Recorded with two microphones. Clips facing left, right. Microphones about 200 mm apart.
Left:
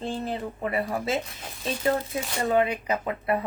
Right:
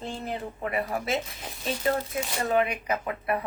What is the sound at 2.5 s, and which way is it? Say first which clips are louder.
Speech: left 2 dB; 25° left (ahead or behind).